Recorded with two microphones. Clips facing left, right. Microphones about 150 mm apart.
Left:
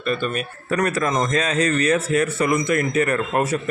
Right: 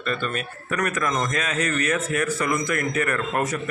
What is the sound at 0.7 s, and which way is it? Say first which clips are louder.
A man's voice: left 4 dB; 30° left (ahead or behind).